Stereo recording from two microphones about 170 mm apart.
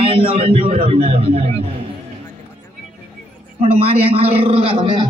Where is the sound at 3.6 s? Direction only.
35° right (ahead or behind).